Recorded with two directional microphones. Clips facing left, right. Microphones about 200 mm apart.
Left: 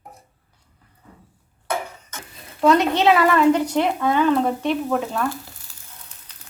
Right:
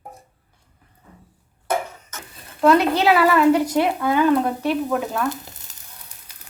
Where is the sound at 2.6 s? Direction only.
5° right (ahead or behind).